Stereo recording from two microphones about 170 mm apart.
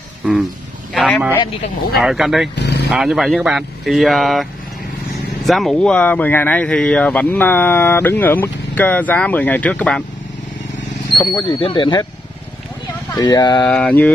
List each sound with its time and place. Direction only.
0.2 s speech: centre (ahead or behind)
0.9 s a sound: 5° left (ahead or behind)
2.0 s speech: centre (ahead or behind)
2.5 s speech: 80° left
2.9 s speech: centre (ahead or behind)
5.5 s speech: centre (ahead or behind)
11.4 s speech: 30° left (ahead or behind)
13.1 s speech: 25° left (ahead or behind)
13.7 s speech: 5° left (ahead or behind)